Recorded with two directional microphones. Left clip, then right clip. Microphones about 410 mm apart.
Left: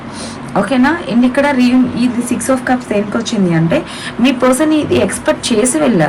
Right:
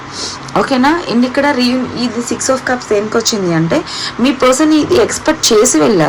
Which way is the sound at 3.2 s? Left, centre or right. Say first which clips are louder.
Right 3 dB; centre.